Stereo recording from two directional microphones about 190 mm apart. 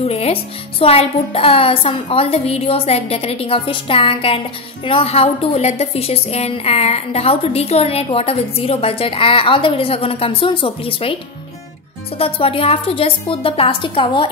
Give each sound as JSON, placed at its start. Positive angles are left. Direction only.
{"t": 0.0, "sound": "a child's voice", "side_deg": 35}
{"t": 12.2, "sound": "a child's voice", "side_deg": 30}